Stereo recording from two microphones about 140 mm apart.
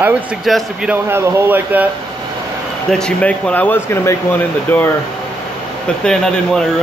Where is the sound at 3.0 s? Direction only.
10° left (ahead or behind).